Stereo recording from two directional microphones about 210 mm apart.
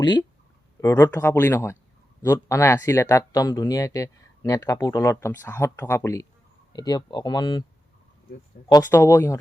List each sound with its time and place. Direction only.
0.0 s speech: 20° left (ahead or behind)
8.7 s speech: 15° left (ahead or behind)